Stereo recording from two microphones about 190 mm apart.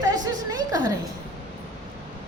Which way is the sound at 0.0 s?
20° right (ahead or behind).